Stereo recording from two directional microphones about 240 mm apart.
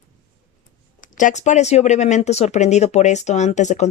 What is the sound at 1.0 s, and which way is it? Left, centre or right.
Speech, left.